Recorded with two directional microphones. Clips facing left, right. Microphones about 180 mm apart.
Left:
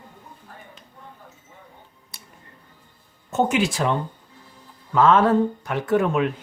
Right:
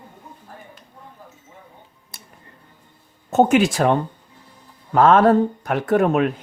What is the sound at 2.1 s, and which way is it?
Music, 50° right (ahead or behind).